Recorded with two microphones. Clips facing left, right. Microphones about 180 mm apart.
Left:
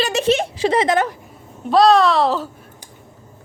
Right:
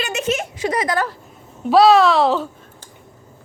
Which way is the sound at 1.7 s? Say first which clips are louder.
Right 1 dB; 5° right (ahead or behind).